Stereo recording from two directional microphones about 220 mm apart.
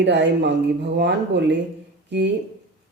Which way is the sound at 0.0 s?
50° right (ahead or behind).